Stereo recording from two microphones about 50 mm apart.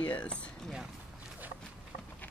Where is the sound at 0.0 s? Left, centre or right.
Left.